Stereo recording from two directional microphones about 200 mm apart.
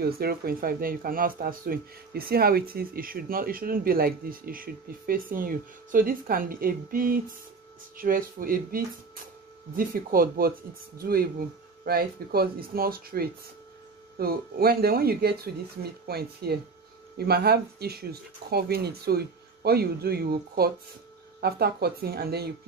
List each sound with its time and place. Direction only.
0.0 s speech: 50° right (ahead or behind)